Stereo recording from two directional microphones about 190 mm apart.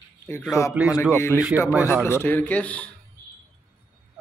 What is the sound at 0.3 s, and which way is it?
Speech, 15° left (ahead or behind).